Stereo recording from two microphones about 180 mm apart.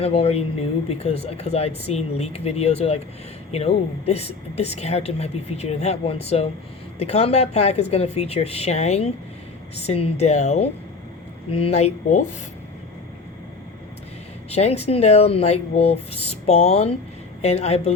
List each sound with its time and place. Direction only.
0.0 s a woman's voice: 35° left (ahead or behind)
14.5 s a woman's voice: 35° left (ahead or behind)